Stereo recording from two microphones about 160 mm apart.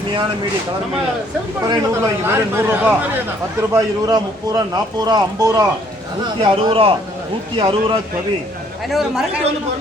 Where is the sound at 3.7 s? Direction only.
25° right (ahead or behind).